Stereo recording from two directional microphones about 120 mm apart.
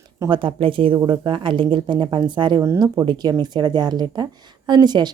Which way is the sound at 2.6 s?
25° right (ahead or behind).